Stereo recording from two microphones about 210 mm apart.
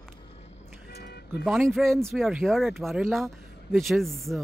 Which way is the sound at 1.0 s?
50° left (ahead or behind).